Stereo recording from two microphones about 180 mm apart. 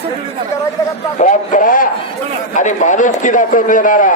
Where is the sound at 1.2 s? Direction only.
45° left (ahead or behind).